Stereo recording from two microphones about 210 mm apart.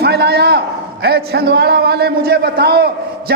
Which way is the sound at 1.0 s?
50° right (ahead or behind).